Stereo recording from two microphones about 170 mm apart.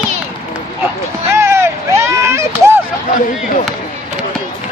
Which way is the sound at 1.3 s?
15° right (ahead or behind).